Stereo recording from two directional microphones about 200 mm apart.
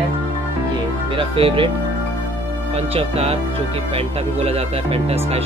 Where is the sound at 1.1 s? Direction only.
25° right (ahead or behind).